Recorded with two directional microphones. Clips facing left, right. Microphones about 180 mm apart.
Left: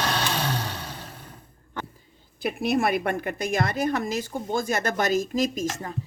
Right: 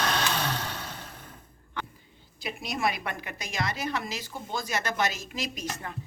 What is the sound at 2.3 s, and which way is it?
A woman's voice, 55° left (ahead or behind).